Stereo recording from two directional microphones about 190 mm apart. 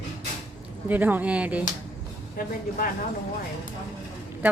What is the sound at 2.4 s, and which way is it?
Speech, 45° left (ahead or behind).